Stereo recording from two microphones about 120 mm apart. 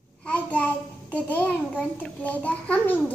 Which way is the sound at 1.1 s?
10° left (ahead or behind).